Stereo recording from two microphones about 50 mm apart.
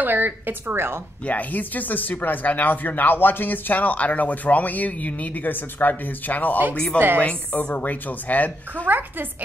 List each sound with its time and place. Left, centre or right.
0.0 s a woman's voice: right
1.2 s speech: left
6.7 s speech: left
8.8 s a woman's voice: right